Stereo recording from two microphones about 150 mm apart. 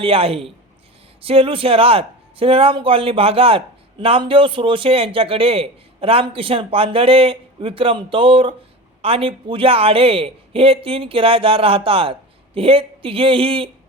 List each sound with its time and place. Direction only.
0.0 s a man's voice: 40° right (ahead or behind)